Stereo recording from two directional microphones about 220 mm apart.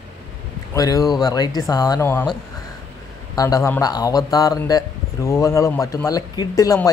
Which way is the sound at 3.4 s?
15° left (ahead or behind).